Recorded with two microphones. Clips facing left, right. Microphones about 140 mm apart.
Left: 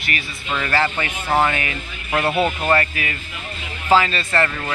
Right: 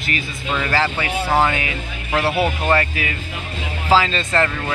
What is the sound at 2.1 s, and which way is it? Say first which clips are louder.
Speech: even; 5° right (ahead or behind).